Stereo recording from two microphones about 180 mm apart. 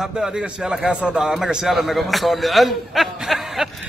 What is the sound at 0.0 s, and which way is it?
A man's voice, 5° right (ahead or behind).